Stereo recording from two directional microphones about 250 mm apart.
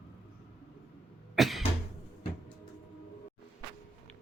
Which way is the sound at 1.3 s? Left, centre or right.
Centre.